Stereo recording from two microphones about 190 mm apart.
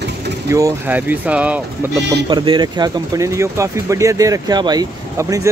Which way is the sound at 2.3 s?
25° right (ahead or behind).